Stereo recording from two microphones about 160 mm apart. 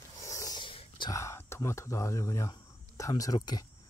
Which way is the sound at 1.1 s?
20° left (ahead or behind).